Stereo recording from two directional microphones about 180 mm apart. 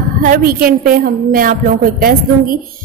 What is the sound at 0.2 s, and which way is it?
A woman's voice, 50° right (ahead or behind).